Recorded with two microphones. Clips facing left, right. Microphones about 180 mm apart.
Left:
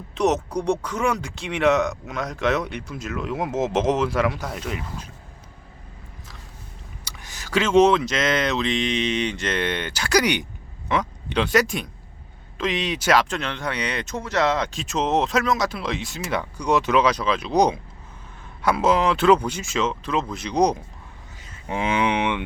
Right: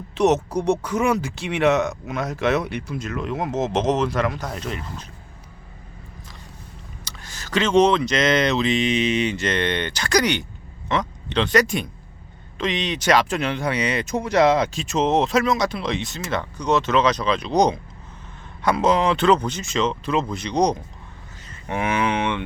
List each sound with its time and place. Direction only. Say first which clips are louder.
0.1 s speech: right 3 dB; centre (ahead or behind)
7.0 s speech: even; 15° left (ahead or behind)
13.3 s speech: right 4 dB; 10° right (ahead or behind)
14.7 s speech: right 2 dB; centre (ahead or behind)
21.4 s cattle: right 1 dB; 5° left (ahead or behind)
21.8 s speech: even; 20° left (ahead or behind)